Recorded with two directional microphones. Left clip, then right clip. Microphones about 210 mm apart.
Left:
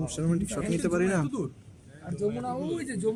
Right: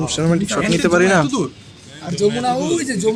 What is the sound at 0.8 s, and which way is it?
Speech, 5° left (ahead or behind).